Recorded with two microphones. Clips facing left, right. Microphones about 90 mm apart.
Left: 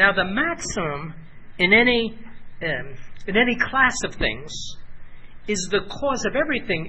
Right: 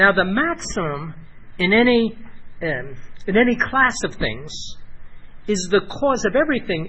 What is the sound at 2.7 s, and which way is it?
Speech, 20° right (ahead or behind).